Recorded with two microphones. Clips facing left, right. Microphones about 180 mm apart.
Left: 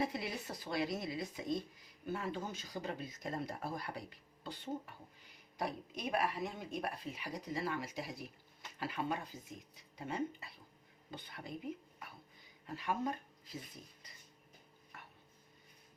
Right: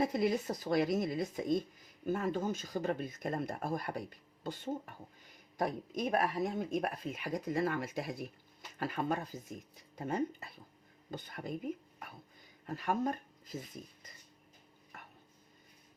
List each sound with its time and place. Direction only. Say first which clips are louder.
0.0 s speech: right 8 dB; 45° right (ahead or behind)